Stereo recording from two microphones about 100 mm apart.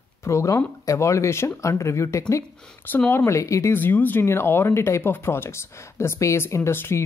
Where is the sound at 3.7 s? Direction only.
20° left (ahead or behind).